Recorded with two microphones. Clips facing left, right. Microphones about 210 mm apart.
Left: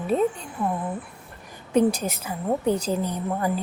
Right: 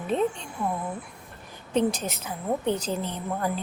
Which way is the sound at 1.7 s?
10° left (ahead or behind).